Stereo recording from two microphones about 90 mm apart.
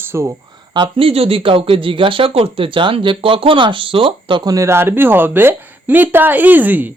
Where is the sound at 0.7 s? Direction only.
70° right (ahead or behind).